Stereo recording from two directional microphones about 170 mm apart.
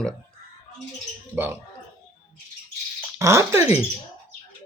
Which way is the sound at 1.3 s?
10° right (ahead or behind).